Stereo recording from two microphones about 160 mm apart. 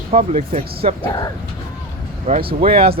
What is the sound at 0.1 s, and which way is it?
Speech, 40° right (ahead or behind).